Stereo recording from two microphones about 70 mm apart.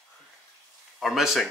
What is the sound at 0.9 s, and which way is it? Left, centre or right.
Speech, centre.